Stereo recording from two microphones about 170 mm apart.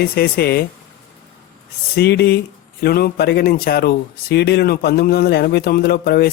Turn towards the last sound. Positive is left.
turn(degrees=65)  # may be behind; listen again after turning